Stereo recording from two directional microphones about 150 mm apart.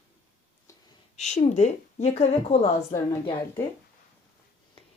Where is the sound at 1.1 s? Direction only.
50° left (ahead or behind).